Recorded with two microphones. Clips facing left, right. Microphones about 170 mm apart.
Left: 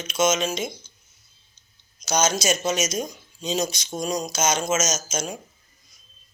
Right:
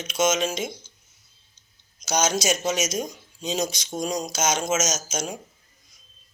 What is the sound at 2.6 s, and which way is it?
Speech, 70° right (ahead or behind).